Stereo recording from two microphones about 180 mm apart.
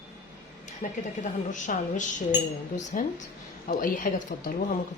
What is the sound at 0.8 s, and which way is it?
Speech, 40° left (ahead or behind).